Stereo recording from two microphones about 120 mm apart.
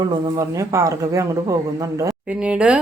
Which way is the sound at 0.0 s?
25° right (ahead or behind).